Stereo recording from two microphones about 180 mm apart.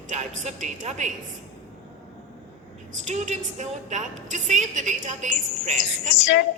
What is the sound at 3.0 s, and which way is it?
A woman's voice, 40° right (ahead or behind).